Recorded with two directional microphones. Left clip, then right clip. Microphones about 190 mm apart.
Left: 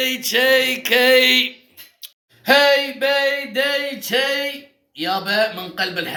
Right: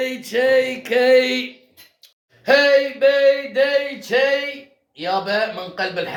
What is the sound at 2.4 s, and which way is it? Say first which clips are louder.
A man's voice: even; 15° right (ahead or behind).